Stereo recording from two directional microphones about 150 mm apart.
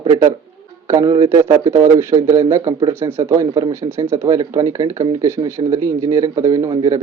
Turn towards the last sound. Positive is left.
turn(degrees=-25)  # may be behind; listen again after turning